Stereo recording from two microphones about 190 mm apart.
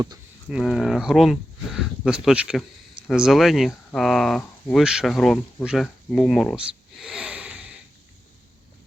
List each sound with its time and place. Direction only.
0.4 s speech: centre (ahead or behind)